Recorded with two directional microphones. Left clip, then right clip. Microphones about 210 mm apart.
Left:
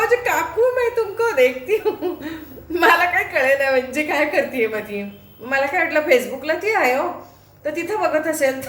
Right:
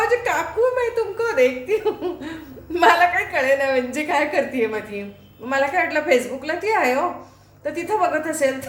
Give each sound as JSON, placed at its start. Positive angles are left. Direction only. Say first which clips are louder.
{"t": 0.0, "sound": "a woman's voice", "louder": "left 2 dB", "side_deg": -5}